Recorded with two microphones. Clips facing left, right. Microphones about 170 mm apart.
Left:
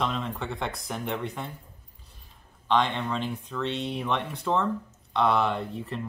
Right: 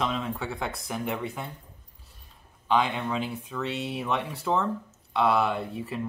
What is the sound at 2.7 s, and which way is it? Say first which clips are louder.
Speech: even; 5° right (ahead or behind).